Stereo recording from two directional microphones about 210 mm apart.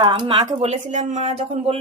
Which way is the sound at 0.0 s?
25° right (ahead or behind).